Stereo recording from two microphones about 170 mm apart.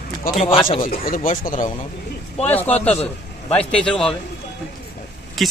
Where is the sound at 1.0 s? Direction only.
55° left (ahead or behind).